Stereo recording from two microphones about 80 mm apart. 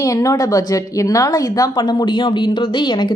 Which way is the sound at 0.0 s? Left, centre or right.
Left.